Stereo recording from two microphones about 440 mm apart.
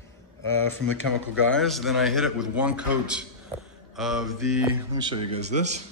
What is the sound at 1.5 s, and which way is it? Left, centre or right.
A man's voice, centre.